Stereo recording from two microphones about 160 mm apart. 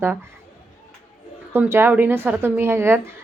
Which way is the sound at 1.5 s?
15° right (ahead or behind).